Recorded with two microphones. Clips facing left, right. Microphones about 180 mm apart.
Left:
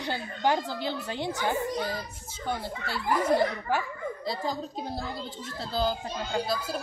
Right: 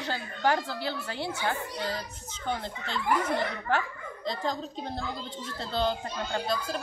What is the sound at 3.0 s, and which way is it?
Speech, 35° left (ahead or behind).